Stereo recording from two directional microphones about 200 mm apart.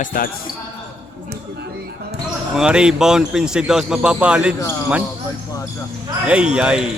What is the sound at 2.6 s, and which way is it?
A man's voice, 5° right (ahead or behind).